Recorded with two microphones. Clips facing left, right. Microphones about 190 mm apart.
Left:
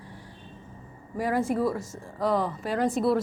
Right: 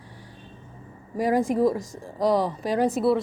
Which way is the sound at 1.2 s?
15° right (ahead or behind).